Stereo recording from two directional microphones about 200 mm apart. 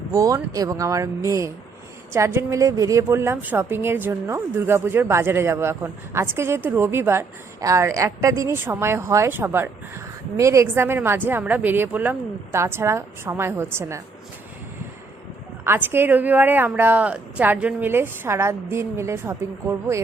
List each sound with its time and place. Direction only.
0.1 s a woman's voice: 15° right (ahead or behind)
15.6 s a woman's voice: 10° right (ahead or behind)